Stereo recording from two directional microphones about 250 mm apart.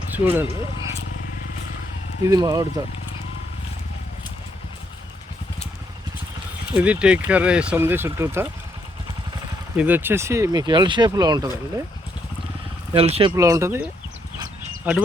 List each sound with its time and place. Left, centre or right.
0.1 s speech: centre
2.2 s speech: centre
6.7 s speech: centre
9.7 s speech: centre
12.9 s speech: right
13.3 s speech: centre
14.9 s speech: centre